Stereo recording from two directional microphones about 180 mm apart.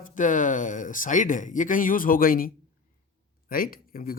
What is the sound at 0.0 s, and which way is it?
Speech, 45° left (ahead or behind).